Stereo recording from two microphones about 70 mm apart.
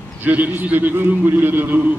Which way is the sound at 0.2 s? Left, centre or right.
Right.